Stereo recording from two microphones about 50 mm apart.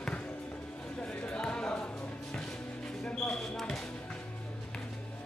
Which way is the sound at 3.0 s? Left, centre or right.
Left.